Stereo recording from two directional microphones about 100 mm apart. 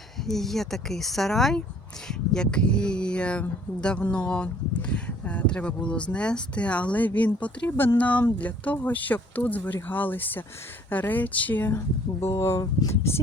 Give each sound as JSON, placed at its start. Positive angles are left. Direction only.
{"t": 0.3, "sound": "speech", "side_deg": 5}